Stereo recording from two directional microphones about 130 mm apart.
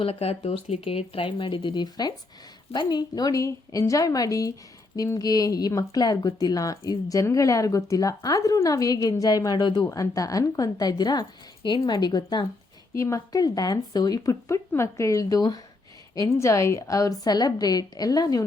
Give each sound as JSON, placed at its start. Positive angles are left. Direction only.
{"t": 0.0, "sound": "speech", "side_deg": 50}